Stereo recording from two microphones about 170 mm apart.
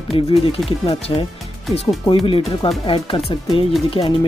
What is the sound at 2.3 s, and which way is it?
Speech, 35° left (ahead or behind).